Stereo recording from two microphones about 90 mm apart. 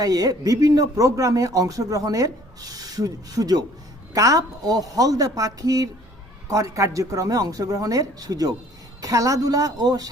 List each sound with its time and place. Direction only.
0.0 s a man's voice: 45° right (ahead or behind)